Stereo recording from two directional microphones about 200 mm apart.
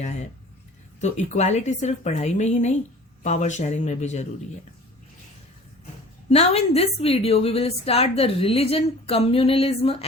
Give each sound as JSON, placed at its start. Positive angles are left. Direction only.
{"t": 1.0, "sound": "speech", "side_deg": 35}
{"t": 6.3, "sound": "a woman's voice", "side_deg": 30}